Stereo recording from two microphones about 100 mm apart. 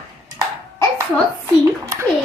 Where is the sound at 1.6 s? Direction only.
30° right (ahead or behind).